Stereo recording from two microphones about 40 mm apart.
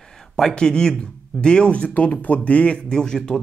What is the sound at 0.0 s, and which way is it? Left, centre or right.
Speech, centre.